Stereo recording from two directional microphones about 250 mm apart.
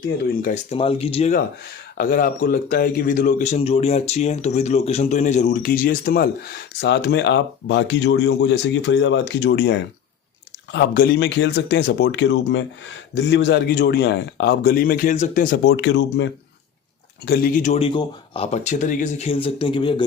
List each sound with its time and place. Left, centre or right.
0.4 s a man's voice: left
17.2 s speech: left